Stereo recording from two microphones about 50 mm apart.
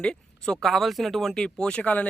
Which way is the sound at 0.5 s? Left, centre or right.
Centre.